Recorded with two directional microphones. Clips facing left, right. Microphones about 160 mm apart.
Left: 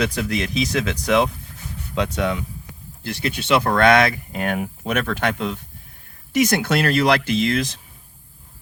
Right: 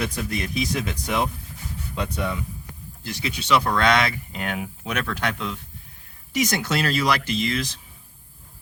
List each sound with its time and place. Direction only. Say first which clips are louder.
0.0 s speech: left 5 dB; 85° left
3.0 s speech: left 5 dB; 60° left (ahead or behind)